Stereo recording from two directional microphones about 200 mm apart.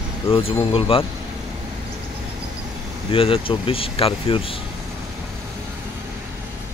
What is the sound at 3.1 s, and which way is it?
Speech, 25° left (ahead or behind).